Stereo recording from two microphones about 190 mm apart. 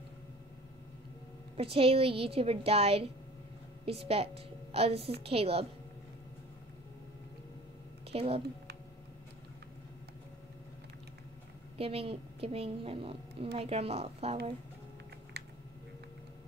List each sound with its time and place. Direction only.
1.6 s a woman's voice: 30° right (ahead or behind)
8.1 s speech: 30° right (ahead or behind)
11.8 s a woman's voice: 30° right (ahead or behind)